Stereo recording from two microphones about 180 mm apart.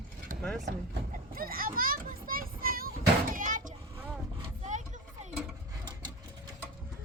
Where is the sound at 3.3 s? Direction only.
45° right (ahead or behind).